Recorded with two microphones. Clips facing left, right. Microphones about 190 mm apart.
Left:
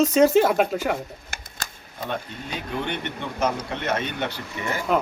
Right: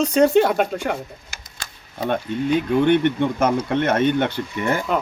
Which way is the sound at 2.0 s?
55° right (ahead or behind).